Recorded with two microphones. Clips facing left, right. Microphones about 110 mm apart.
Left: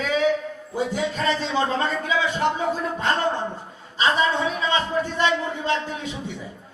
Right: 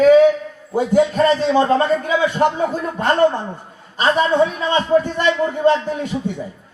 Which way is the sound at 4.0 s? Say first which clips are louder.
Right 6 dB; 50° right (ahead or behind).